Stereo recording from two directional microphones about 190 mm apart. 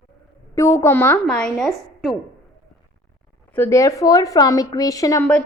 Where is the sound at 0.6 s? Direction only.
15° left (ahead or behind); by 2.2 s centre (ahead or behind).